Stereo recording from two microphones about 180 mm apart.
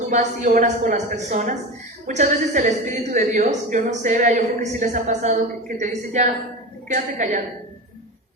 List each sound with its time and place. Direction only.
0.1 s a woman's voice: 45° right (ahead or behind)